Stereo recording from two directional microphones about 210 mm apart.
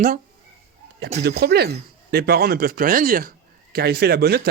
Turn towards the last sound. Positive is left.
turn(degrees=-50)  # may be behind; listen again after turning